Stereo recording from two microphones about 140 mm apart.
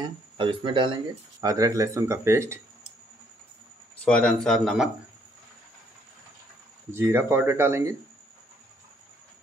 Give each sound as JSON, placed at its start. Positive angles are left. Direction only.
{"t": 0.0, "sound": "speech", "side_deg": -35}
{"t": 1.4, "sound": "speech", "side_deg": -25}
{"t": 4.0, "sound": "speech", "side_deg": 5}
{"t": 6.9, "sound": "speech", "side_deg": -15}